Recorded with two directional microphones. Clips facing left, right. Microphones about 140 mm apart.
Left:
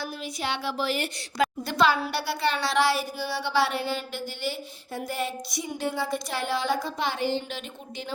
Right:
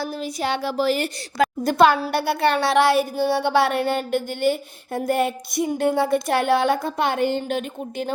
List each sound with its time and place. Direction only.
0.0 s a woman's voice: 40° right (ahead or behind)